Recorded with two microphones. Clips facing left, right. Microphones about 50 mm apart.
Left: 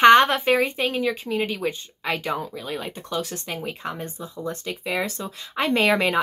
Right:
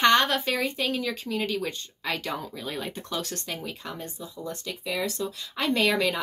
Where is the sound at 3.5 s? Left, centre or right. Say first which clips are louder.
Left 5 dB; left.